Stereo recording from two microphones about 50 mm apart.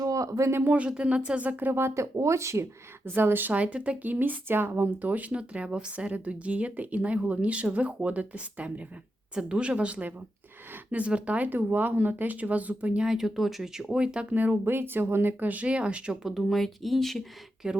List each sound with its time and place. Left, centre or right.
0.1 s speech: right
0.8 s speech: right
1.8 s speech: right
3.1 s speech: right
3.5 s speech: right
4.1 s speech: right
9.3 s speech: centre
11.4 s speech: right
13.1 s speech: centre
13.9 s speech: right
14.3 s speech: right
15.4 s speech: right
16.2 s speech: centre
17.6 s speech: centre